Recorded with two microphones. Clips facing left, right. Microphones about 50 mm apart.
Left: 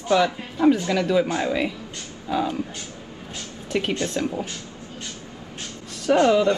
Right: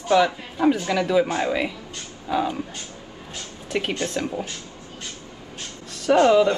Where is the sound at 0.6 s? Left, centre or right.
Centre.